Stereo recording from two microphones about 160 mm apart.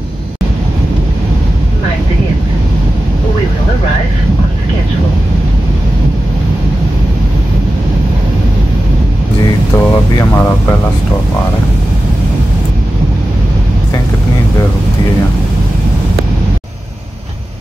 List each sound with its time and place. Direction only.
9.8 s speech: 15° left (ahead or behind)